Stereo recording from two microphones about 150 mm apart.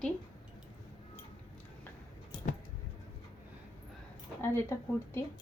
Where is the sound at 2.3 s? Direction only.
35° left (ahead or behind).